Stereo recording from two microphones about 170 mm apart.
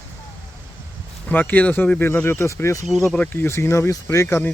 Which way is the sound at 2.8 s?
Centre (ahead or behind).